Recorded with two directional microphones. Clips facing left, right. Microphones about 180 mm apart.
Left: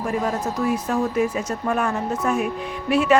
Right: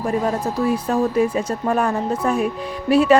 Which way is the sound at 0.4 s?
30° right (ahead or behind).